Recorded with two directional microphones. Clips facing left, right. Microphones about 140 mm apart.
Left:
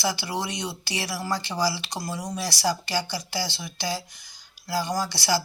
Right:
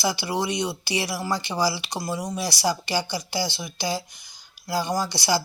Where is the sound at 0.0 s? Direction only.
15° right (ahead or behind).